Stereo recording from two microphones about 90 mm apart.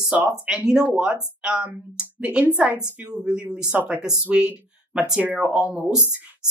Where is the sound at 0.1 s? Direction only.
10° right (ahead or behind).